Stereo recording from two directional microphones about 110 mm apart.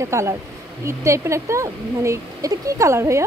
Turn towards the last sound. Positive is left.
turn(degrees=-25)  # may be behind; listen again after turning